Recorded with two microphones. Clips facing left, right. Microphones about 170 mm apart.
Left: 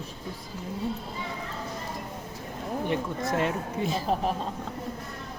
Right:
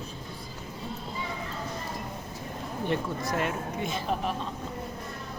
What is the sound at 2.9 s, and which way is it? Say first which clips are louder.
Speech: even; 25° left (ahead or behind).